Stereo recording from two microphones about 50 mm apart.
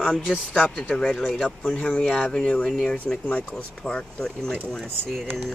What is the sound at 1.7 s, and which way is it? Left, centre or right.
Speech, left.